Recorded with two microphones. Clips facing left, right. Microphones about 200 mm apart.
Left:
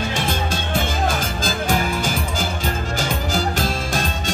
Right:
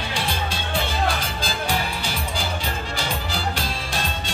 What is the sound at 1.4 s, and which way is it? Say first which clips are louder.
Music: left 5 dB; 45° left (ahead or behind).